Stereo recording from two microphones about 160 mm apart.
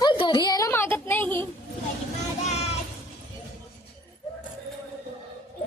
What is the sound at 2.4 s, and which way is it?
Music, 45° left (ahead or behind).